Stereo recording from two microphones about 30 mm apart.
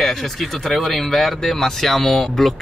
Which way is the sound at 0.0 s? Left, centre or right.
Centre.